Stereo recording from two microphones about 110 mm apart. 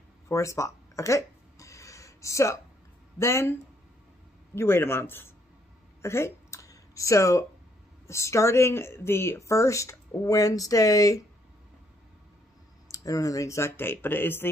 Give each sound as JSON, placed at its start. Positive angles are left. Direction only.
{"t": 0.3, "sound": "a sound", "side_deg": 30}
{"t": 3.2, "sound": "speech", "side_deg": 25}
{"t": 4.6, "sound": "speech", "side_deg": 20}
{"t": 6.0, "sound": "a sound", "side_deg": 25}
{"t": 8.1, "sound": "speech", "side_deg": 25}
{"t": 12.9, "sound": "speech", "side_deg": 30}